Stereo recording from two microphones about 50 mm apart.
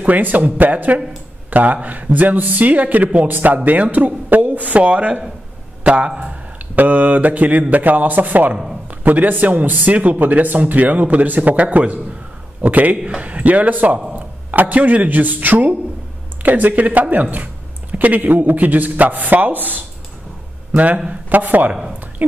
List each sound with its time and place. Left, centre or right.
0.0 s speech: right